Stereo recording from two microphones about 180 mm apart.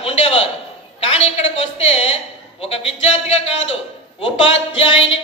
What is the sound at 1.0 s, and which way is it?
A woman's voice, 35° left (ahead or behind).